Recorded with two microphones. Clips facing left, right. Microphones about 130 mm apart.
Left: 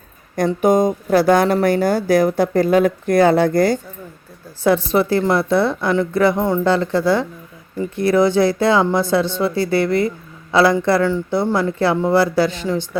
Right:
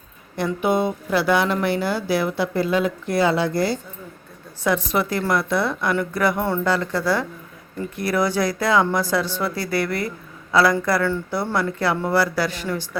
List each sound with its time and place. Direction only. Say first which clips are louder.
0.3 s speech: left 6 dB; 40° left (ahead or behind)
4.6 s speech: left 6 dB; 30° left (ahead or behind)